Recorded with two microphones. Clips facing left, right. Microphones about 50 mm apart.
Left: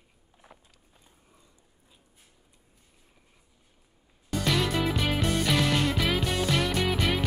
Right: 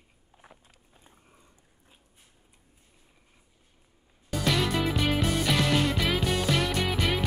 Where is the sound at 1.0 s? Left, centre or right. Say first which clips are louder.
Right 3 dB; right.